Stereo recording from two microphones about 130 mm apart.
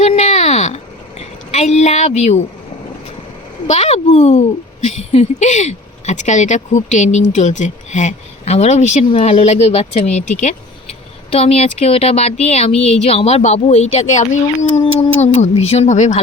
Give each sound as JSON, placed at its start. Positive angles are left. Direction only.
{"t": 0.0, "sound": "a sound", "side_deg": 55}
{"t": 1.2, "sound": "speech", "side_deg": 55}
{"t": 3.7, "sound": "speech", "side_deg": 55}
{"t": 11.3, "sound": "speech", "side_deg": 50}